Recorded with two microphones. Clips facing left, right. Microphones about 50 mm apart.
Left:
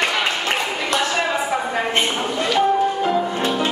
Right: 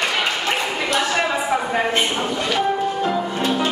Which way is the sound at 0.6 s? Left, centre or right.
Centre.